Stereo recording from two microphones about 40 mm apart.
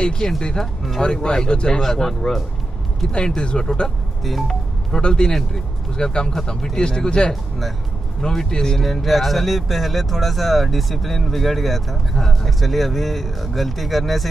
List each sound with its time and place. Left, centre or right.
0.0 s speech: left
1.8 s speech: centre
3.1 s speech: left
4.2 s speech: centre
4.9 s speech: centre
8.7 s speech: centre